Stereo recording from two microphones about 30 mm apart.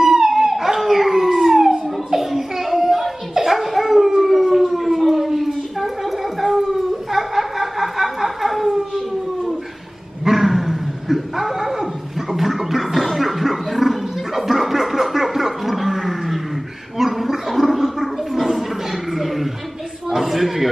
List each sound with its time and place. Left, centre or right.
0.0 s dog: centre
4.2 s siren: centre
10.2 s dog: centre
17.0 s gargling: centre
18.5 s a sound: centre